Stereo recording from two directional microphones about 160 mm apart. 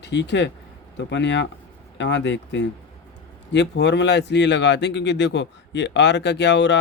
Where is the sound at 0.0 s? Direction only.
90° left.